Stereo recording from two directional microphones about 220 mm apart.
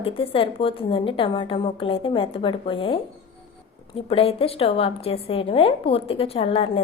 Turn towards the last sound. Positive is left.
turn(degrees=25)  # may be behind; listen again after turning